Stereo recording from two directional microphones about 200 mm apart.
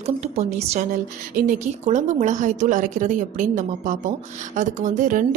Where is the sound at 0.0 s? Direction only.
35° right (ahead or behind).